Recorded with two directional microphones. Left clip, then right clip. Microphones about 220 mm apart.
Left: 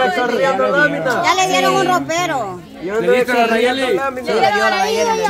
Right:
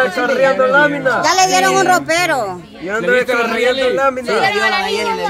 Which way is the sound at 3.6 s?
25° left (ahead or behind).